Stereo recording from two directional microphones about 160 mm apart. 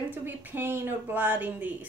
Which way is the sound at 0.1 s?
10° right (ahead or behind).